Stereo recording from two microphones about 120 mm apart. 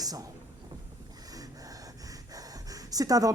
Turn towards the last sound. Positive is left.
turn(degrees=-30)  # may be behind; listen again after turning